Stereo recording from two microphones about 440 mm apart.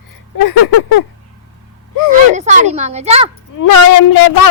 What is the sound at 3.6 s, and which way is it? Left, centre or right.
Speech, left.